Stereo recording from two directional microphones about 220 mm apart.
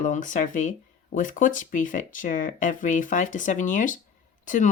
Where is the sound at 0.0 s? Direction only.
35° left (ahead or behind).